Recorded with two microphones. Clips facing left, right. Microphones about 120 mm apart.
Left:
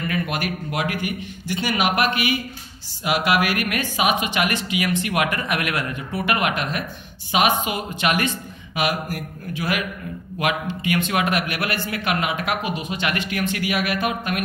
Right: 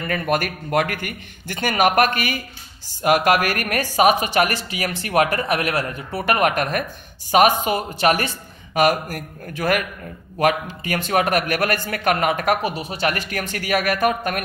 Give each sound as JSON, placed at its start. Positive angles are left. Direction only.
{"t": 0.0, "sound": "speech", "side_deg": -45}